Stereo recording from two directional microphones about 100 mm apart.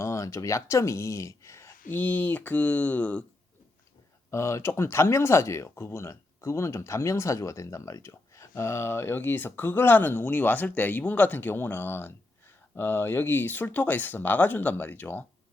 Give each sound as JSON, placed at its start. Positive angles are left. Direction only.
{"t": 0.0, "sound": "speech", "side_deg": 30}
{"t": 4.3, "sound": "speech", "side_deg": 30}